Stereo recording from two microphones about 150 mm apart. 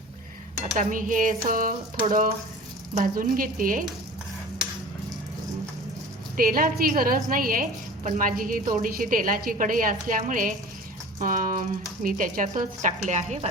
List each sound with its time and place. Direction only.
0.8 s a woman's voice: 60° right (ahead or behind)
6.3 s a woman's voice: 75° right (ahead or behind); by 13.5 s 50° right (ahead or behind)